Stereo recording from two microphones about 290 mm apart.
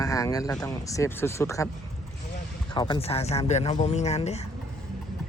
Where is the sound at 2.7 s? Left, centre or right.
Centre.